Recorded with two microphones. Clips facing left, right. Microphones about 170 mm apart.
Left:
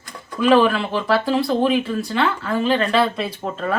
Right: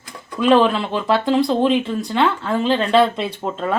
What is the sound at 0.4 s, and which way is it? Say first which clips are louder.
Speech: right 1 dB; 20° right (ahead or behind).